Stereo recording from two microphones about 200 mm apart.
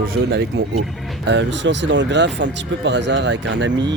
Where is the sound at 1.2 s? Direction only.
65° right (ahead or behind).